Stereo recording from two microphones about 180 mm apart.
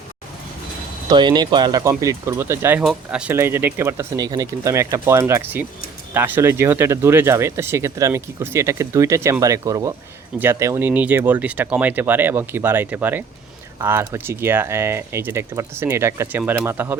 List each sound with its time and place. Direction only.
1.1 s speech: 25° right (ahead or behind)